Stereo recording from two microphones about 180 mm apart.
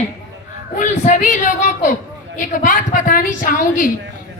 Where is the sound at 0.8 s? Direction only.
45° left (ahead or behind).